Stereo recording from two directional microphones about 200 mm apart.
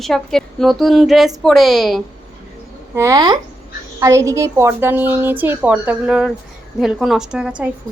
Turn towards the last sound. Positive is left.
turn(degrees=-5)  # may be behind; listen again after turning